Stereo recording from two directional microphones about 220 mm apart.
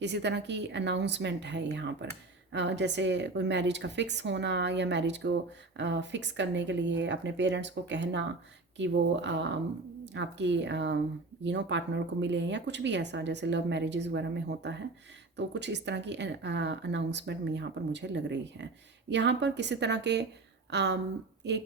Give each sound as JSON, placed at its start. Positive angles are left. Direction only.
{"t": 0.0, "sound": "speech", "side_deg": -50}